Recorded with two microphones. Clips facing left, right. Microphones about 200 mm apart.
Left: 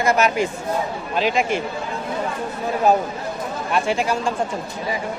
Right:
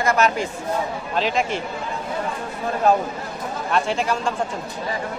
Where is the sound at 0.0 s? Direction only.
15° left (ahead or behind).